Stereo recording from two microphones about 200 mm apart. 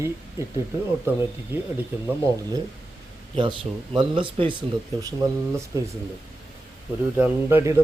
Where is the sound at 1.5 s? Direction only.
10° right (ahead or behind).